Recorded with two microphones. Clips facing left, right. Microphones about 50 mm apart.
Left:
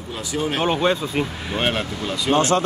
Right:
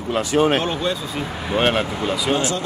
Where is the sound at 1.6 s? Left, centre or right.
Centre.